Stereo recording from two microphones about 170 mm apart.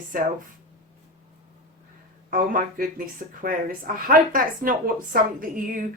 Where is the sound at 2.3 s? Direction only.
55° right (ahead or behind).